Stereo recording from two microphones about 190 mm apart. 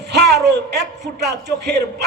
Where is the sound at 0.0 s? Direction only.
60° right (ahead or behind).